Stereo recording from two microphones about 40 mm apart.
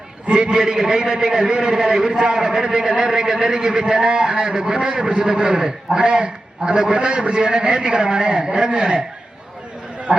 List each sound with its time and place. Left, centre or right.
0.3 s a man's voice: right
10.1 s a man's voice: right